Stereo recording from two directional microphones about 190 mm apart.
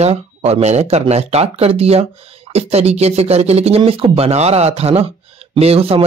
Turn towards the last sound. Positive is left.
turn(degrees=-30)  # may be behind; listen again after turning